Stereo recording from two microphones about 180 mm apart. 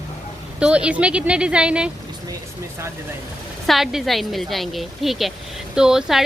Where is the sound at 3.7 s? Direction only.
Centre (ahead or behind).